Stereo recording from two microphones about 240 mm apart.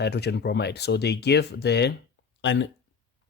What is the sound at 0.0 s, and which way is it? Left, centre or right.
Speech, left.